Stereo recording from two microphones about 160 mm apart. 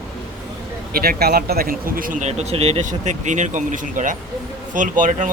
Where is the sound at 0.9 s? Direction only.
75° right (ahead or behind).